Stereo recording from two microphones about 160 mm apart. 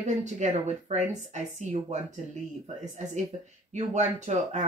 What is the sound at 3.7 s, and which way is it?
Speech, 45° right (ahead or behind).